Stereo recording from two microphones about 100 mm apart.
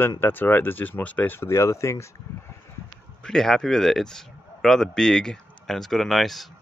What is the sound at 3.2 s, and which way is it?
Speech, 5° left (ahead or behind).